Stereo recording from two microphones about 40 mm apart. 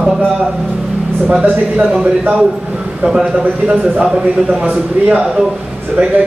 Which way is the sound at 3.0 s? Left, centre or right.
Right.